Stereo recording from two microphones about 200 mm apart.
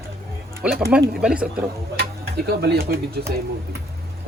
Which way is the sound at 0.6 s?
5° right (ahead or behind).